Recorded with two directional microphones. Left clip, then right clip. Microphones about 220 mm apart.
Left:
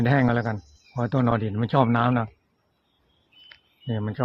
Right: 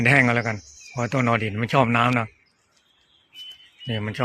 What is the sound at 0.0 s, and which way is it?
Speech, 35° right (ahead or behind).